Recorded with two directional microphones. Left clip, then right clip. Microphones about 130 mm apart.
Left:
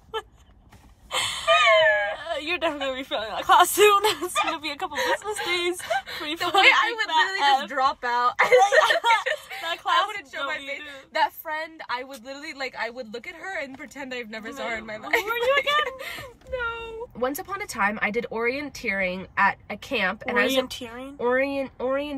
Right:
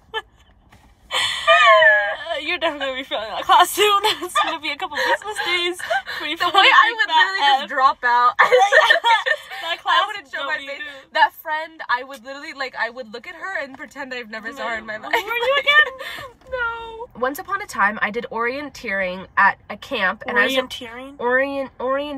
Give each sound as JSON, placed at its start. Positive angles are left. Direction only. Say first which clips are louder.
{"t": 1.1, "sound": "speech", "louder": "right 6 dB", "side_deg": 20}